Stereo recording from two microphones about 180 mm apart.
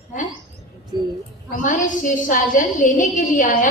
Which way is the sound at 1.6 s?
45° left (ahead or behind).